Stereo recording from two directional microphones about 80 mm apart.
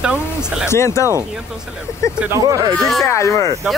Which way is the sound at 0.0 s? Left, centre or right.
Centre.